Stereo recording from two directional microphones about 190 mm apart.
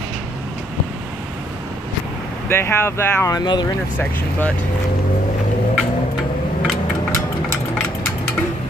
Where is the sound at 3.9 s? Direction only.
10° left (ahead or behind).